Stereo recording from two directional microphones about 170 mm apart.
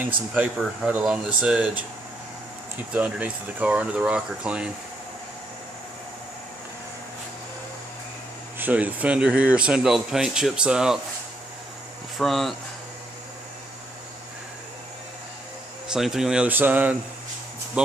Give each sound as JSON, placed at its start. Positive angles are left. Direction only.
{"t": 0.3, "sound": "speech", "side_deg": -5}
{"t": 8.5, "sound": "speech", "side_deg": -10}
{"t": 12.2, "sound": "speech", "side_deg": 0}
{"t": 15.9, "sound": "speech", "side_deg": 0}